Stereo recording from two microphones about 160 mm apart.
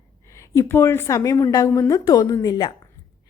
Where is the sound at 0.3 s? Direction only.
20° left (ahead or behind).